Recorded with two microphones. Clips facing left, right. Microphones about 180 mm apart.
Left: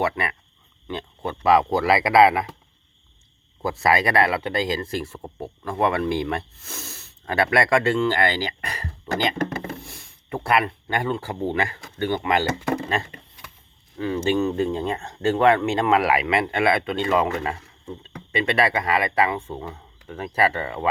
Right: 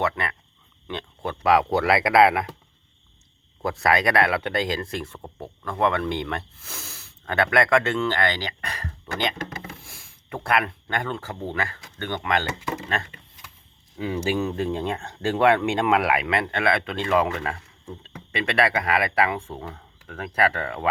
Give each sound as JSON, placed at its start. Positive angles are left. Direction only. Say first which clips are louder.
{"t": 0.0, "sound": "speech", "louder": "left 2 dB", "side_deg": 5}
{"t": 3.6, "sound": "speech", "louder": "left 1 dB", "side_deg": 0}
{"t": 9.5, "sound": "speech", "louder": "left 7 dB", "side_deg": 50}
{"t": 9.8, "sound": "speech", "louder": "left 5 dB", "side_deg": 0}
{"t": 12.6, "sound": "a sound", "louder": "left 6 dB", "side_deg": 60}
{"t": 14.0, "sound": "speech", "louder": "left 3 dB", "side_deg": -10}